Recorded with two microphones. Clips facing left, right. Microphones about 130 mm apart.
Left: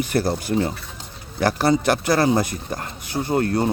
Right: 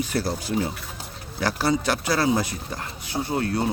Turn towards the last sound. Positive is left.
turn(degrees=50)  # may be behind; listen again after turning